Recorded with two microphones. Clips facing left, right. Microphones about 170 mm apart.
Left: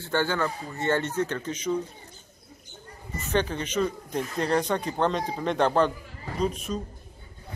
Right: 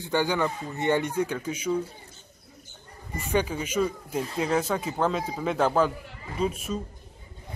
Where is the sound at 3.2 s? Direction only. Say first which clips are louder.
Even; 10° right (ahead or behind).